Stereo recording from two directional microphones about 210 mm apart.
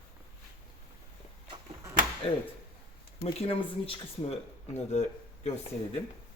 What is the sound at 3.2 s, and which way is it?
Speech, 25° left (ahead or behind).